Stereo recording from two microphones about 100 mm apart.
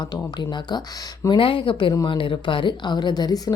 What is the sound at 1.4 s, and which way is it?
Speech, 60° left (ahead or behind).